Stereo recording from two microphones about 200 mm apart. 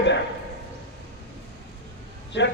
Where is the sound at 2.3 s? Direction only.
60° left (ahead or behind).